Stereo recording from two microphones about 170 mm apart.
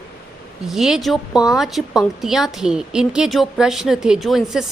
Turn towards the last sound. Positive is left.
turn(degrees=0)  # may be behind; listen again after turning